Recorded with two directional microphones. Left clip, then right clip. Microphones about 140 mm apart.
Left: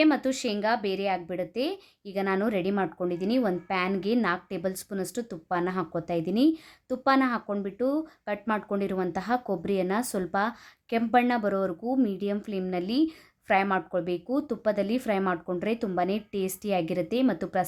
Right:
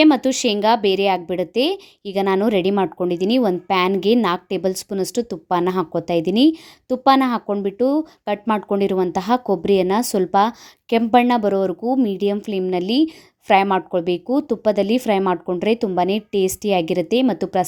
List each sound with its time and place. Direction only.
0.0 s a woman's voice: 45° right (ahead or behind)